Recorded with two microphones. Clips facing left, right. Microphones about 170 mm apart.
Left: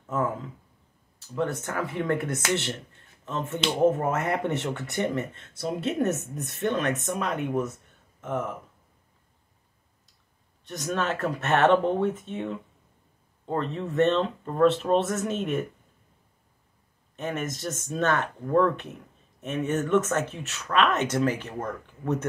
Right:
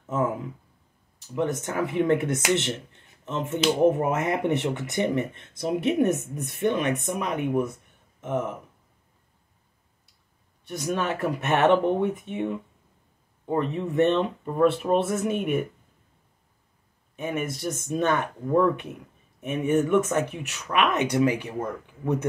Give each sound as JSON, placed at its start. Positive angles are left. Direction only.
{"t": 0.0, "sound": "a sound", "side_deg": -20}
{"t": 1.2, "sound": "speech", "side_deg": -15}
{"t": 10.6, "sound": "speech", "side_deg": -10}
{"t": 17.1, "sound": "speech", "side_deg": -10}